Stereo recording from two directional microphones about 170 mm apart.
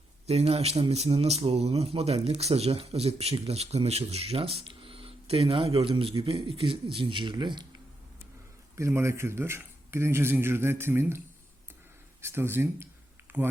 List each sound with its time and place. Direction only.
0.3 s speech: 35° right (ahead or behind)
8.7 s speech: 15° right (ahead or behind)
12.2 s speech: 15° right (ahead or behind)